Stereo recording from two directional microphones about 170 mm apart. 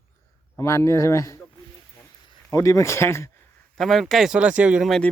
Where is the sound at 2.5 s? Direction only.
20° left (ahead or behind).